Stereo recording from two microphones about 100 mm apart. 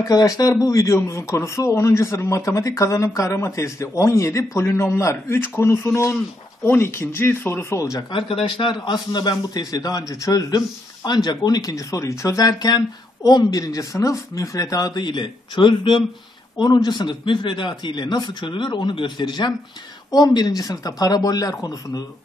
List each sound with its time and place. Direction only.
0.0 s a man's voice: 40° left (ahead or behind)
8.1 s a man's voice: 60° left (ahead or behind); by 22.0 s 40° left (ahead or behind)